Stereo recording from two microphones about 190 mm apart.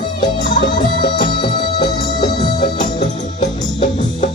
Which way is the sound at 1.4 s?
25° left (ahead or behind).